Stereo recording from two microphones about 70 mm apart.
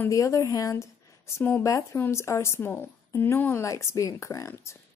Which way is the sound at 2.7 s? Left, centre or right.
Left.